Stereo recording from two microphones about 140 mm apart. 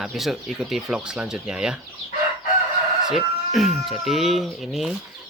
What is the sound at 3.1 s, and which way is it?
Speech, centre (ahead or behind).